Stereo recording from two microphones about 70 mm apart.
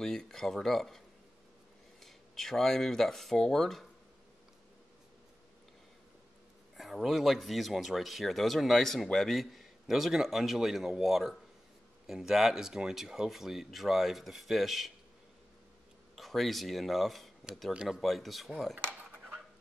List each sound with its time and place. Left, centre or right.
0.0 s speech: centre
6.8 s speech: centre
16.2 s speech: centre